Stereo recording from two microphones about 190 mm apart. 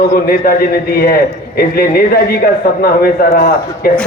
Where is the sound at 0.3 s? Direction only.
50° left (ahead or behind).